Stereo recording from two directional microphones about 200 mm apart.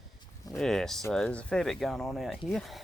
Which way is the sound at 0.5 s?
Centre (ahead or behind).